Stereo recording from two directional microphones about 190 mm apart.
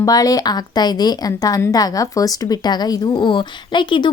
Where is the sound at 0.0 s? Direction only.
20° left (ahead or behind).